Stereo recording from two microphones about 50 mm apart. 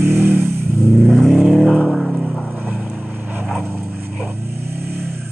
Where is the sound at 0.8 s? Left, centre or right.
Centre.